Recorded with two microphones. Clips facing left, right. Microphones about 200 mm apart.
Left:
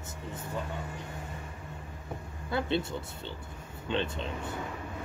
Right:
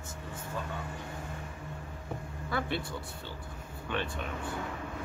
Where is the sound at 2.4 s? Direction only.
20° left (ahead or behind).